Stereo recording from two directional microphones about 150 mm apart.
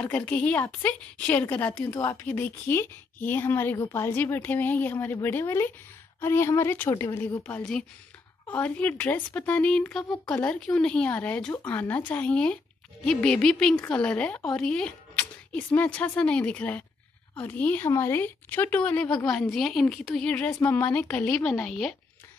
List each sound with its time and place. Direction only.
0.0 s speech: 10° left (ahead or behind)